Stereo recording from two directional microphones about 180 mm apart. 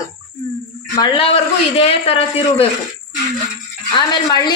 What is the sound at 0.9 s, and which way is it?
A man's voice, 25° left (ahead or behind).